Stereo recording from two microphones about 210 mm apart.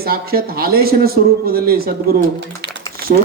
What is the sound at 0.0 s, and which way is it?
A man's voice, 45° right (ahead or behind).